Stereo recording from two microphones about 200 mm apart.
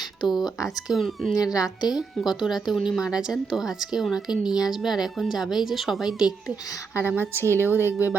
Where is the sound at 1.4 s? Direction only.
20° left (ahead or behind).